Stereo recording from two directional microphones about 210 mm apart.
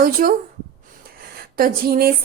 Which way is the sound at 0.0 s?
40° right (ahead or behind).